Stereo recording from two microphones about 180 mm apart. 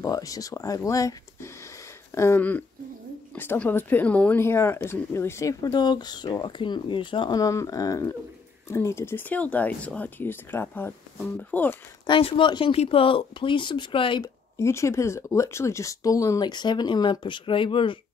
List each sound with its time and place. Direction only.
0.0 s speech: 20° left (ahead or behind)
12.1 s speech: 30° left (ahead or behind)
14.6 s speech: 15° left (ahead or behind)